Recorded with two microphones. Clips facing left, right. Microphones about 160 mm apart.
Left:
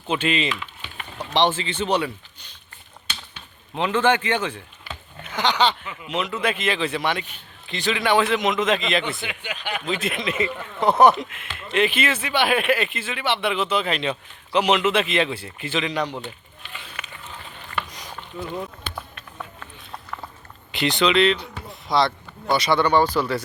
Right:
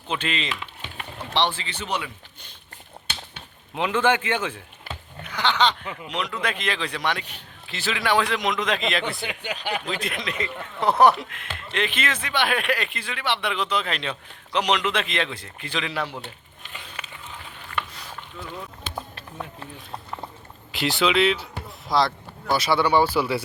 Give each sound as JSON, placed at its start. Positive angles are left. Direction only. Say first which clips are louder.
{"t": 0.1, "sound": "speech", "louder": "left 5 dB", "side_deg": 5}
{"t": 3.8, "sound": "speech", "louder": "left 2 dB", "side_deg": -10}
{"t": 5.2, "sound": "a sound", "louder": "left 1 dB", "side_deg": 20}
{"t": 5.8, "sound": "speech", "louder": "right 2 dB", "side_deg": -35}
{"t": 6.1, "sound": "speech", "louder": "left 4 dB", "side_deg": 5}
{"t": 9.2, "sound": "speech", "louder": "right 1 dB", "side_deg": -40}
{"t": 9.8, "sound": "speech", "louder": "left 4 dB", "side_deg": 0}
{"t": 17.0, "sound": "a sound", "louder": "left 1 dB", "side_deg": -30}
{"t": 17.3, "sound": "a sound", "louder": "left 1 dB", "side_deg": 0}
{"t": 17.9, "sound": "boat", "louder": "left 4 dB", "side_deg": 15}
{"t": 20.7, "sound": "speech", "louder": "left 2 dB", "side_deg": 0}